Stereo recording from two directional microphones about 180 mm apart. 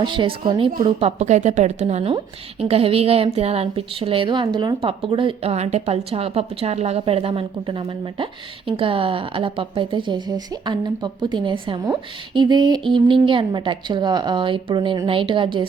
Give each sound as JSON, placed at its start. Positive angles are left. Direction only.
{"t": 0.0, "sound": "a woman's voice", "side_deg": -25}